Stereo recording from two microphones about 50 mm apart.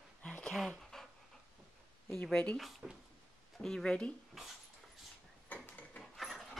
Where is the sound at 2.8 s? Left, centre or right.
Centre.